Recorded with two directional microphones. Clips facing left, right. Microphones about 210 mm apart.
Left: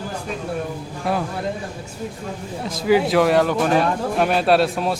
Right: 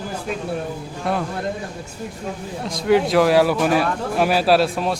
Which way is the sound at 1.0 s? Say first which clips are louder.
Even; centre (ahead or behind).